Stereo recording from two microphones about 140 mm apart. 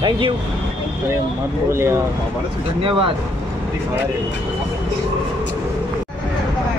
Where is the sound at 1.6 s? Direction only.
20° right (ahead or behind).